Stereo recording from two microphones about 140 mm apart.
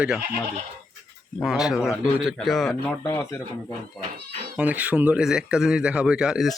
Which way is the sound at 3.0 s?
25° left (ahead or behind).